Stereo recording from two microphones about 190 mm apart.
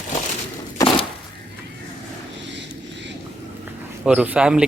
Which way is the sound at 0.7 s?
25° left (ahead or behind).